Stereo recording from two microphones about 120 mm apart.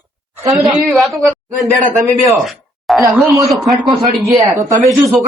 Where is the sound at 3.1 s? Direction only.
Centre (ahead or behind).